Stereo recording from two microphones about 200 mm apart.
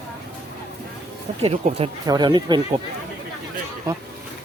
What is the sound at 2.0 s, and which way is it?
Speech, 20° right (ahead or behind).